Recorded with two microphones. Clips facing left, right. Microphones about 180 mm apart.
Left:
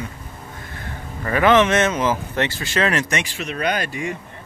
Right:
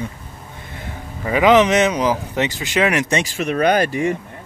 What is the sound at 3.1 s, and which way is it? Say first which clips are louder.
Speech: right 5 dB; 40° right (ahead or behind).